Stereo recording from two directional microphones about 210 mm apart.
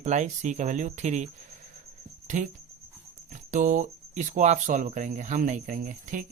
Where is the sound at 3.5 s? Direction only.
35° right (ahead or behind).